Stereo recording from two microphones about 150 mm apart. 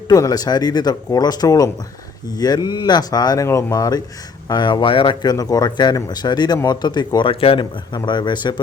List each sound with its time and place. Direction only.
0.1 s speech: 25° left (ahead or behind)